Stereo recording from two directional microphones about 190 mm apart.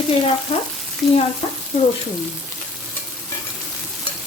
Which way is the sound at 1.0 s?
Centre (ahead or behind).